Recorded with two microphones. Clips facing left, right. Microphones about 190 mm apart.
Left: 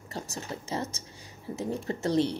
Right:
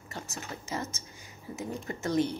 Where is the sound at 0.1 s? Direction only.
35° left (ahead or behind).